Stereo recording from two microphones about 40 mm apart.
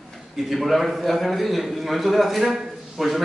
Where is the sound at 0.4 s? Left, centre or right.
Centre.